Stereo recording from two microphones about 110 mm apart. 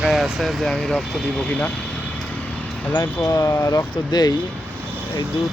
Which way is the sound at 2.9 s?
30° left (ahead or behind).